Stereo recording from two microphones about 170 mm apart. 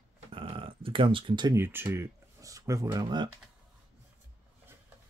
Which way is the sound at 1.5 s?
15° right (ahead or behind).